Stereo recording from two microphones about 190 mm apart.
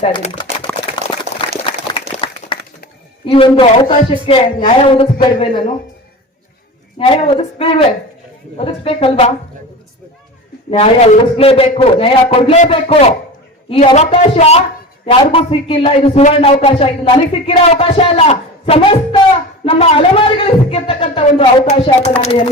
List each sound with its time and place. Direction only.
0.0 s a man's voice: 30° left (ahead or behind)
0.7 s a sound: 5° left (ahead or behind)
1.3 s a sound: 35° left (ahead or behind)
3.2 s a man's voice: 30° left (ahead or behind)
7.0 s a man's voice: 30° left (ahead or behind)
10.7 s a man's voice: 35° left (ahead or behind)